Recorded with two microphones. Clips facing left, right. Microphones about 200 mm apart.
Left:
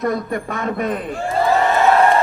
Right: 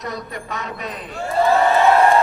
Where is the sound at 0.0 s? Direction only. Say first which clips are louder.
Left 9 dB; 50° left (ahead or behind).